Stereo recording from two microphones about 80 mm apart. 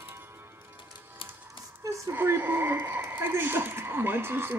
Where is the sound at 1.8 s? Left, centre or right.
Right.